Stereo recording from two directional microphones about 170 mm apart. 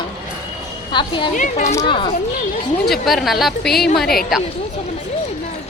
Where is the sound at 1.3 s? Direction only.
45° left (ahead or behind).